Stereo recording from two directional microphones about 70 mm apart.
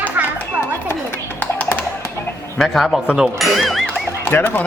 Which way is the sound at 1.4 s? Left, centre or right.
Left.